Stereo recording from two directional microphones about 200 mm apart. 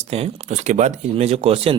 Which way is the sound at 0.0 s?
30° right (ahead or behind).